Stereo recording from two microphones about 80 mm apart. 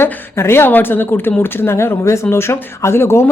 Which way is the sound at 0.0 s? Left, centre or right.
Left.